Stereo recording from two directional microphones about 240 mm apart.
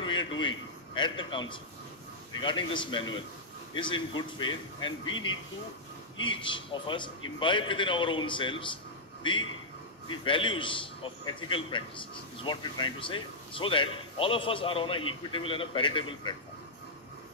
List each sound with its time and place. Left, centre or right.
0.0 s a man's voice: centre
6.1 s a man's voice: centre